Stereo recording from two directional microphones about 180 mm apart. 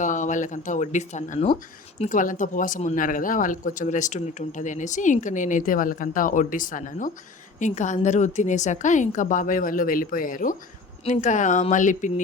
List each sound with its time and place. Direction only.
0.0 s speech: 45° left (ahead or behind)